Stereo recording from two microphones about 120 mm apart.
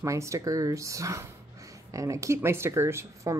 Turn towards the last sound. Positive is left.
turn(degrees=-20)  # may be behind; listen again after turning